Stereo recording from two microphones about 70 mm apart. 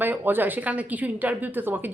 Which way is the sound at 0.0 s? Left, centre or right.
Right.